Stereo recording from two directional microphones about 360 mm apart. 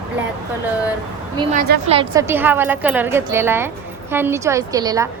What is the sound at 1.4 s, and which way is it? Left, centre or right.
Speech, right.